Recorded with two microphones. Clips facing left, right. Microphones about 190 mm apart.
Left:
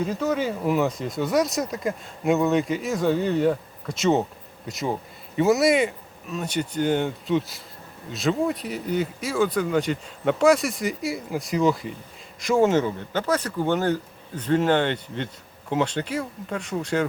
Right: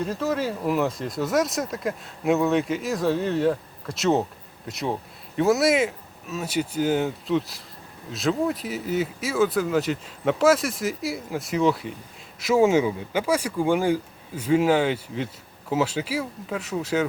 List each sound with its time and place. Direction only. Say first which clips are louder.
0.0 s speech: left 1 dB; centre (ahead or behind)